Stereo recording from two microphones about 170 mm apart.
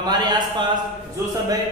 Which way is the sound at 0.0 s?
25° right (ahead or behind).